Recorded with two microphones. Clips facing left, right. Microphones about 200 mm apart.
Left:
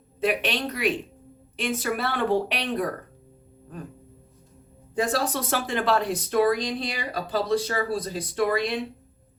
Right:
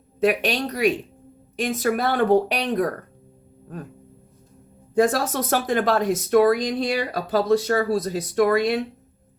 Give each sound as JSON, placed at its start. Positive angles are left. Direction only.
{"t": 0.3, "sound": "speech", "side_deg": -40}
{"t": 4.9, "sound": "speech", "side_deg": -45}